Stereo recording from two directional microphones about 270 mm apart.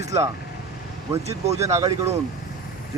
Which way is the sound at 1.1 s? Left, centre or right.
Centre.